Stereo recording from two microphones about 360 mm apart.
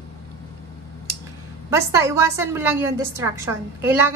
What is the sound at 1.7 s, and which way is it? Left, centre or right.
A woman's voice, centre.